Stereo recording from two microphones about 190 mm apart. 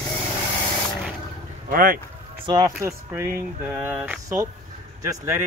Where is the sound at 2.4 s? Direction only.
20° right (ahead or behind).